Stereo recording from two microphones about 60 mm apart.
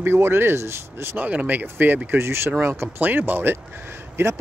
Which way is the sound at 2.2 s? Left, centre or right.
Right.